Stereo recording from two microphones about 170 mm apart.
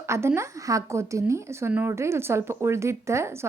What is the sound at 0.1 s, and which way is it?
A woman's voice, 15° right (ahead or behind).